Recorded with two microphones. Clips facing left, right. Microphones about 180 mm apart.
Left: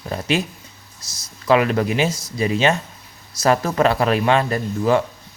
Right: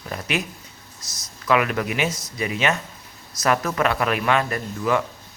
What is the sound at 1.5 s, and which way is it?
Speech, 30° left (ahead or behind).